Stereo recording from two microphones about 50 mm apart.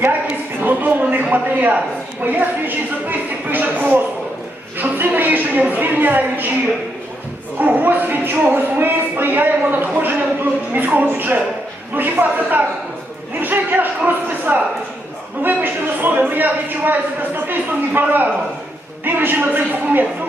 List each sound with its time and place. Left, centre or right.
0.6 s a sound: right
2.2 s a man's voice: right
7.6 s a man's voice: right